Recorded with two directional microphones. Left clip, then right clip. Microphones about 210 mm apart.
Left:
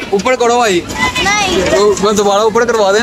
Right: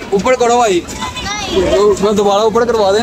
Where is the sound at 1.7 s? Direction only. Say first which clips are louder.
Right 1 dB; 5° right (ahead or behind).